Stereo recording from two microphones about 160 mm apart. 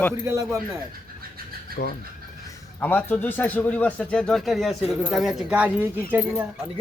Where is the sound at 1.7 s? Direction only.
75° left (ahead or behind).